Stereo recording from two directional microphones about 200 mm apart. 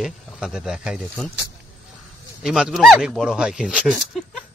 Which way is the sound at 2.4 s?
5° right (ahead or behind).